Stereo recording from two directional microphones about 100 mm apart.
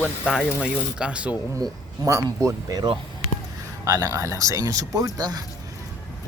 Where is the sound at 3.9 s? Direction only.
35° right (ahead or behind).